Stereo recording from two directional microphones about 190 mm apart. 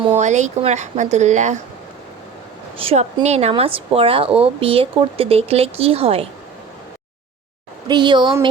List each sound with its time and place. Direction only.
0.0 s speech: 35° right (ahead or behind)
2.7 s a woman's voice: 30° right (ahead or behind)
7.9 s a woman's voice: 25° right (ahead or behind)